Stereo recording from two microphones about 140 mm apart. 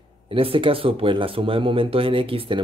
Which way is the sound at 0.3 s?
40° right (ahead or behind).